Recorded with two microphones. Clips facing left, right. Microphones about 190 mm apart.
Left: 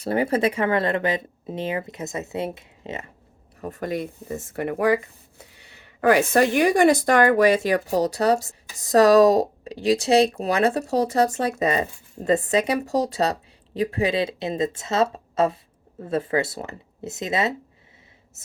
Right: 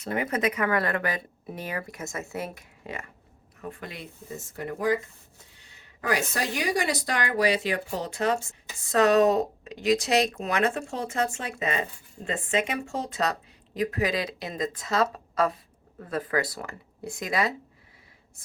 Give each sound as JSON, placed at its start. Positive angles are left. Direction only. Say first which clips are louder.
{"t": 0.0, "sound": "speech", "louder": "left 6 dB", "side_deg": 30}
{"t": 3.6, "sound": "speech", "louder": "left 11 dB", "side_deg": 45}
{"t": 6.0, "sound": "speech", "louder": "left 11 dB", "side_deg": 55}